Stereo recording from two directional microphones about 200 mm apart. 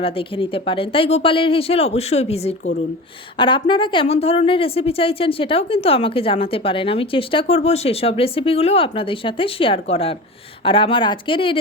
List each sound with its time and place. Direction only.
0.0 s speech: 25° left (ahead or behind)